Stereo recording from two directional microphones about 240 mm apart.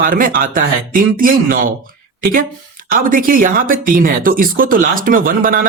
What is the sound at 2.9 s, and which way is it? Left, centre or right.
Speech, right.